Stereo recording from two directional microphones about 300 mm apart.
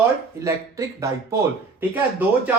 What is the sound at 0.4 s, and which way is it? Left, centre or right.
Speech, centre.